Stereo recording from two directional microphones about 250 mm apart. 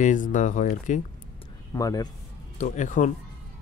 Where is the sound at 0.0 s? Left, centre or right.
Left.